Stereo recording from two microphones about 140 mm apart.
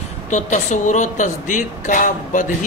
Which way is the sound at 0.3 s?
60° left (ahead or behind).